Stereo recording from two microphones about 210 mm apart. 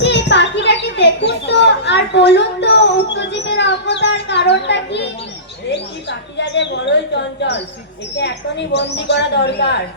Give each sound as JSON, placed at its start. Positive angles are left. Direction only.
{"t": 0.0, "sound": "a sound", "side_deg": 55}
{"t": 5.7, "sound": "bird", "side_deg": 55}
{"t": 8.1, "sound": "a woman's voice", "side_deg": 55}